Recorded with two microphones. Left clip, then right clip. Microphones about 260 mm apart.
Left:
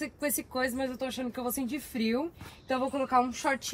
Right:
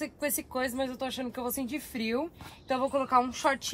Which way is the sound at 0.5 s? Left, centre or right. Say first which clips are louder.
Even; right.